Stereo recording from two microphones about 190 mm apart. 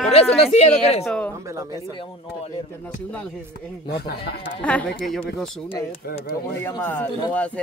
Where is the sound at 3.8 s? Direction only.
55° left (ahead or behind).